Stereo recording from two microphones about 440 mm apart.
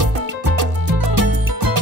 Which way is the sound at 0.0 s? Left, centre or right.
Right.